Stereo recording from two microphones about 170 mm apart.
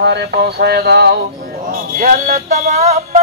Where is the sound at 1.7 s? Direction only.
60° right (ahead or behind).